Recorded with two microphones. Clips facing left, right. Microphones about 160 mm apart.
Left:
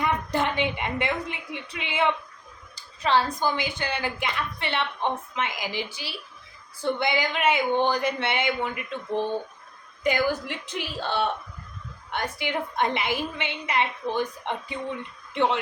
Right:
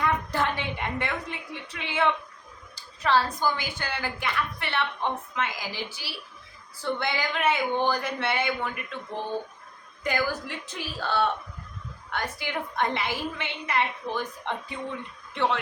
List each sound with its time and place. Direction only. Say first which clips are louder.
0.0 s a woman's voice: left 1 dB; 20° left (ahead or behind)
10.0 s a woman's voice: left 4 dB; 20° left (ahead or behind)